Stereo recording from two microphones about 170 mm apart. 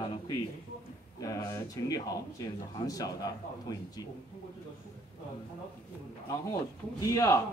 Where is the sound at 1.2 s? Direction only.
20° left (ahead or behind).